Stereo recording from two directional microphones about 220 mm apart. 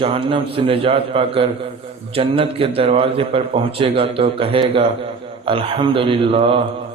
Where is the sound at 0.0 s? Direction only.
25° right (ahead or behind).